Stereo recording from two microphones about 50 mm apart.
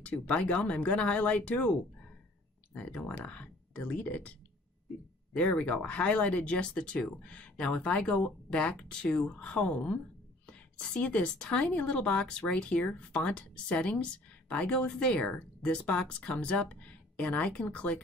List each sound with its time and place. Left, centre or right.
0.0 s a woman's voice: left
2.9 s a woman's voice: centre